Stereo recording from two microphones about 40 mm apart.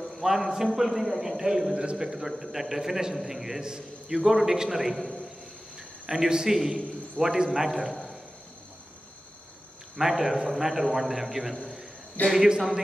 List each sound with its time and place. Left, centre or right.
0.0 s a man's voice: centre
9.9 s a man's voice: centre
12.2 s speech: left